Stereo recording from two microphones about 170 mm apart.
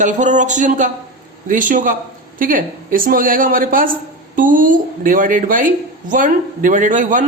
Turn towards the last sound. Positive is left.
turn(degrees=-50)  # may be behind; listen again after turning